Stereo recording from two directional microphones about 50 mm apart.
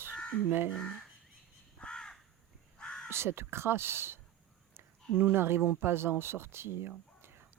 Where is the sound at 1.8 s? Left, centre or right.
Centre.